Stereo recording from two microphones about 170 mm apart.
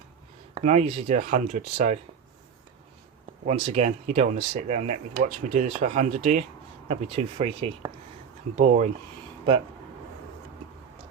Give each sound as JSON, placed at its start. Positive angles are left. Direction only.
{"t": 0.6, "sound": "speech", "side_deg": -40}
{"t": 3.4, "sound": "speech", "side_deg": -40}
{"t": 8.5, "sound": "speech", "side_deg": -45}